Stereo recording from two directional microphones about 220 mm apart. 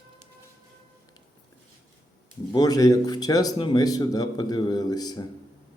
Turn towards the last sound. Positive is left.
turn(degrees=15)  # may be behind; listen again after turning